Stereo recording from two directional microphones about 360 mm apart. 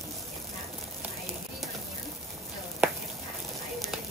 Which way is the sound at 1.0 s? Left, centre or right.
Centre.